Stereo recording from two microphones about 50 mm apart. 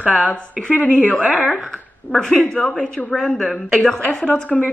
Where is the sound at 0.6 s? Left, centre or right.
Left.